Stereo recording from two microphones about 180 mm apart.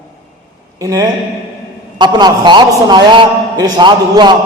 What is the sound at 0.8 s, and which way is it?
A man's voice, 20° right (ahead or behind).